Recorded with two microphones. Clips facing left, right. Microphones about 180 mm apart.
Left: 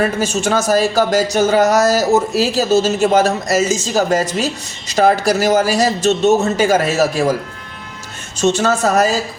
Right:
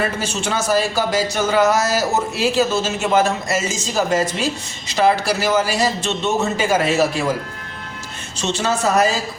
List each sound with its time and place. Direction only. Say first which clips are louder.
0.2 s a man's voice: left 6 dB; 45° left (ahead or behind)
8.4 s a man's voice: left 6 dB; 45° left (ahead or behind)